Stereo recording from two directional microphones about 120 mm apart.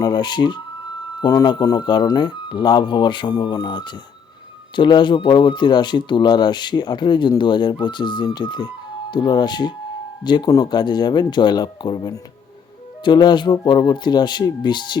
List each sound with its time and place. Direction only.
0.0 s speech: 35° left (ahead or behind)